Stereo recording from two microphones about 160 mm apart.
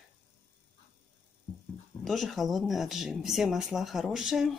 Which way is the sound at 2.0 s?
Centre (ahead or behind).